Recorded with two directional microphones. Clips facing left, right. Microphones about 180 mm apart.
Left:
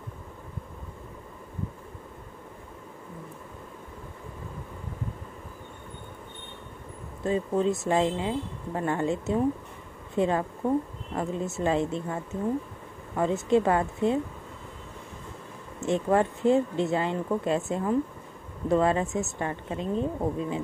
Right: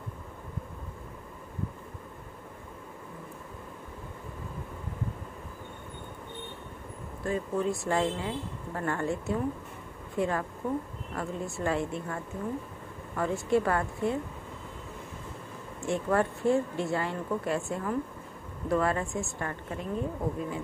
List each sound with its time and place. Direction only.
7.2 s speech: 20° left (ahead or behind)
15.8 s speech: 20° left (ahead or behind)